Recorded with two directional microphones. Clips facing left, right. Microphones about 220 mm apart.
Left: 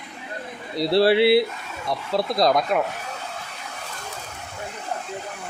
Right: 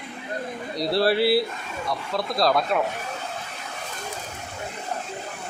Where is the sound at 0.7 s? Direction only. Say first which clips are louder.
Left 4 dB; 25° left (ahead or behind).